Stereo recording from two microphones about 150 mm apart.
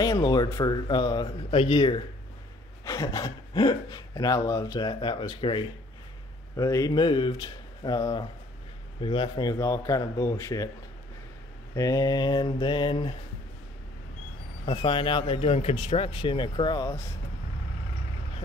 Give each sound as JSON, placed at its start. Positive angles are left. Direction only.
{"t": 0.0, "sound": "speech", "side_deg": 25}
{"t": 2.8, "sound": "speech", "side_deg": 20}
{"t": 6.5, "sound": "speech", "side_deg": 20}
{"t": 11.7, "sound": "speech", "side_deg": 25}
{"t": 14.7, "sound": "speech", "side_deg": 35}